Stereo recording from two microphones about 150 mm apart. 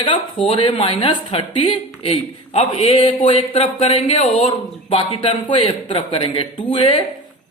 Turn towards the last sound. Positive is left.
turn(degrees=35)  # may be behind; listen again after turning